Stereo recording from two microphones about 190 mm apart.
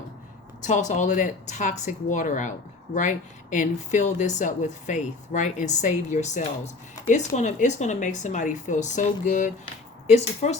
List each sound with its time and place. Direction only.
0.6 s speech: 40° left (ahead or behind)